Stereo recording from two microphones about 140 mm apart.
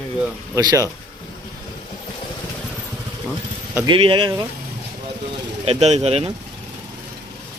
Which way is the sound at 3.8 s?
35° right (ahead or behind).